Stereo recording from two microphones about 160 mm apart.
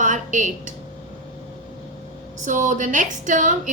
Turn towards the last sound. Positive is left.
turn(degrees=-55)  # may be behind; listen again after turning